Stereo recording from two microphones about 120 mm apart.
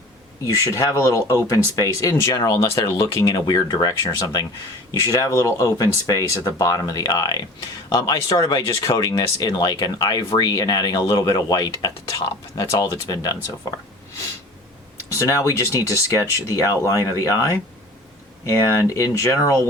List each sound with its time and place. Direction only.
0.4 s speech: 25° left (ahead or behind)
5.0 s speech: 30° left (ahead or behind)
8.4 s speech: 45° left (ahead or behind); by 13.3 s 30° left (ahead or behind)
15.1 s speech: 25° left (ahead or behind)